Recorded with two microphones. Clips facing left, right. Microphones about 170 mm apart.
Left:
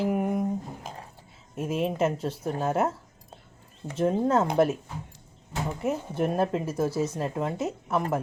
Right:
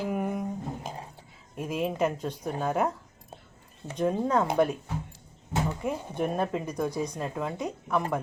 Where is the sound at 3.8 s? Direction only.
35° left (ahead or behind).